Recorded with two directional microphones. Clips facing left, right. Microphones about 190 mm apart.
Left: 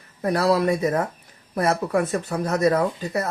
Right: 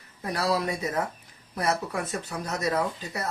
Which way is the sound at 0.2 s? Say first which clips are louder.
Left 7 dB; 55° left (ahead or behind).